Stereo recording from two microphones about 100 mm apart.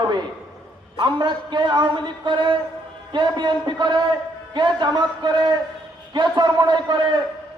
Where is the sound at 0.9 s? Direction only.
50° right (ahead or behind).